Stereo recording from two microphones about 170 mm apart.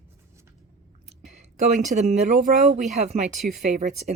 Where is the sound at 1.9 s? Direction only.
45° right (ahead or behind).